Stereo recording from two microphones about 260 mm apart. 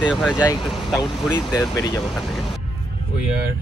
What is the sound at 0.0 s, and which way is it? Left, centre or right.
Speech, centre.